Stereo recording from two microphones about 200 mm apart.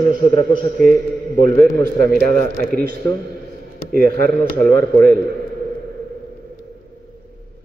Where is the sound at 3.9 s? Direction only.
50° right (ahead or behind).